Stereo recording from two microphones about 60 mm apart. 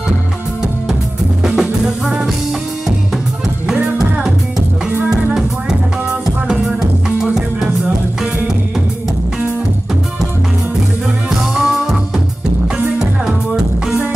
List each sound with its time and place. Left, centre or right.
1.4 s music: centre
3.6 s music: centre
11.2 s music: centre
13.0 s music: centre